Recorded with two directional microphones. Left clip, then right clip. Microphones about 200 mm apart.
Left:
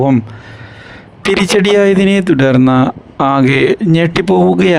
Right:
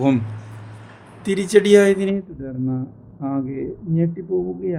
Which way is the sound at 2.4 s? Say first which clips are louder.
Left 18 dB; 80° left.